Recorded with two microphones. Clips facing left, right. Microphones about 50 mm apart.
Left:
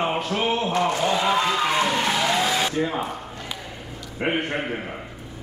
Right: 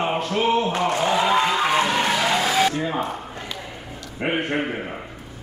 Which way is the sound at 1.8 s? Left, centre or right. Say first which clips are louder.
Right 1 dB; centre.